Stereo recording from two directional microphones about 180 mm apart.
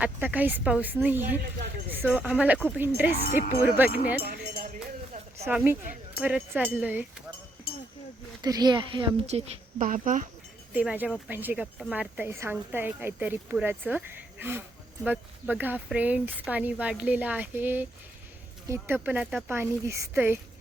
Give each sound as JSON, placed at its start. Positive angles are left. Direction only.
{"t": 0.0, "sound": "a woman's voice", "side_deg": -10}
{"t": 4.2, "sound": "sheep", "side_deg": -50}
{"t": 5.5, "sound": "a woman's voice", "side_deg": -10}
{"t": 8.4, "sound": "a woman's voice", "side_deg": -20}
{"t": 10.8, "sound": "a woman's voice", "side_deg": -5}
{"t": 19.5, "sound": "a woman's voice", "side_deg": -15}